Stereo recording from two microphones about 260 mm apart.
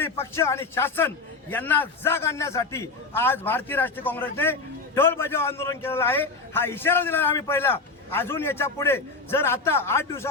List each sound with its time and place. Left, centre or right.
0.0 s a man's voice: centre